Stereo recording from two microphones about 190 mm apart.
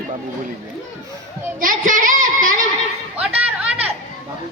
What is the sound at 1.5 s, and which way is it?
Child singing, 45° right (ahead or behind).